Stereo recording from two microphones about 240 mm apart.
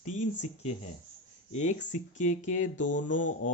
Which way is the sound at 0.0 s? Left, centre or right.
Left.